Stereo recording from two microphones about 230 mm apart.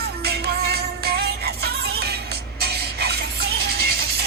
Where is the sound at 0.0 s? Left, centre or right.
Right.